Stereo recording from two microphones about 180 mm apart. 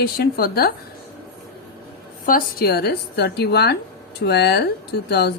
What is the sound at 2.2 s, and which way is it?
A woman's voice, 55° left (ahead or behind).